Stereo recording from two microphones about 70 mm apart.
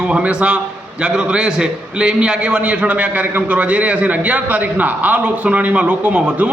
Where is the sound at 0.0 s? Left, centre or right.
Centre.